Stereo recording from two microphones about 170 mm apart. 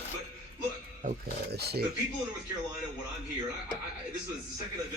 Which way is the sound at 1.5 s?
70° right (ahead or behind).